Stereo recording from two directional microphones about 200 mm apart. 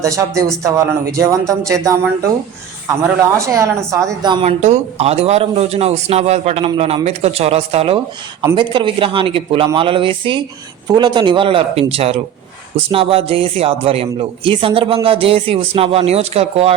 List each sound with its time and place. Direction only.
0.0 s speech: 15° right (ahead or behind)
3.0 s a man's voice: 15° right (ahead or behind); by 16.7 s 30° right (ahead or behind)